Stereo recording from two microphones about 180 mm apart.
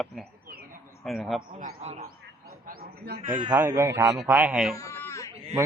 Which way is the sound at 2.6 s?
55° right (ahead or behind).